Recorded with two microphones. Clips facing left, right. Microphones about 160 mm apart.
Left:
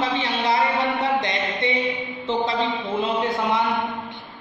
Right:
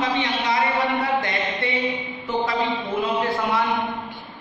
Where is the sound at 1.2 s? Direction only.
20° left (ahead or behind).